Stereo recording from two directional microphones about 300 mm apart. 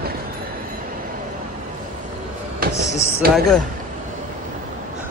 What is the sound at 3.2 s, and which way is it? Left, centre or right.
Speech, right.